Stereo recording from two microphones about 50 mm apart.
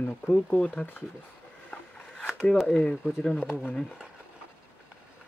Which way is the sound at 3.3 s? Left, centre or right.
Left.